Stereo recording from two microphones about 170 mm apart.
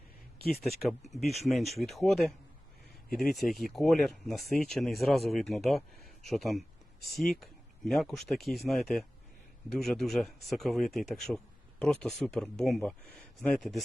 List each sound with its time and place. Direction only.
0.6 s speech: centre (ahead or behind)
1.2 s speech: 40° left (ahead or behind)
1.5 s speech: centre (ahead or behind)